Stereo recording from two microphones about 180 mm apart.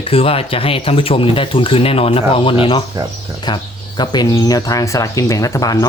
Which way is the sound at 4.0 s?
20° left (ahead or behind).